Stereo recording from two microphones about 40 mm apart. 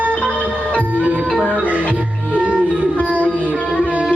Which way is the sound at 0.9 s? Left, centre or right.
Right.